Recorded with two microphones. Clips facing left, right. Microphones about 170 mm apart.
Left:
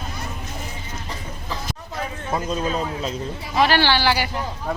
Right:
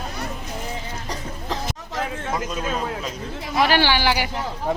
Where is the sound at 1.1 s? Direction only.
90° right.